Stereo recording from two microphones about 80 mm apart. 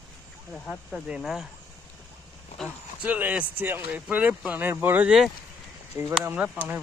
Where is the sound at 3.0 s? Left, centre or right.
Centre.